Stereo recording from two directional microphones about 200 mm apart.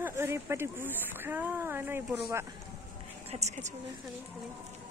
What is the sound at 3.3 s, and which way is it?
Speech, 35° right (ahead or behind).